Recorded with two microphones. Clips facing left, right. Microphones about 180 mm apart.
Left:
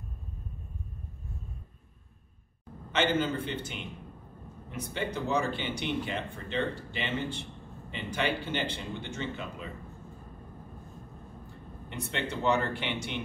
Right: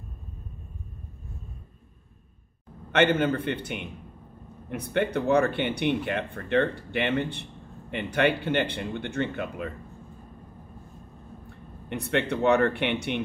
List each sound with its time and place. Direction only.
2.9 s speech: 60° right (ahead or behind)
11.9 s speech: 60° right (ahead or behind)